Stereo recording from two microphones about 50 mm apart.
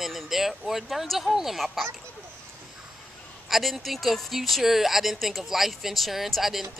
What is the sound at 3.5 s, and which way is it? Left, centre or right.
Speech, centre.